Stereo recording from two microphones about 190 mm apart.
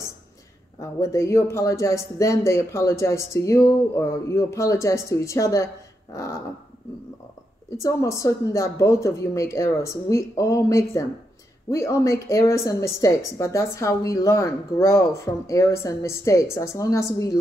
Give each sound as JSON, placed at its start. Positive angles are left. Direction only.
{"t": 0.7, "sound": "a woman's voice", "side_deg": 15}
{"t": 7.7, "sound": "a woman's voice", "side_deg": 15}